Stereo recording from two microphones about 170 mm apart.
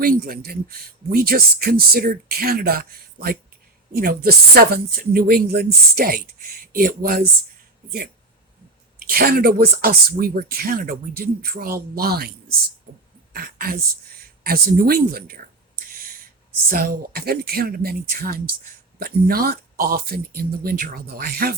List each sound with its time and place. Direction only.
0.0 s speech: 60° right (ahead or behind)
9.0 s a woman's voice: 60° right (ahead or behind)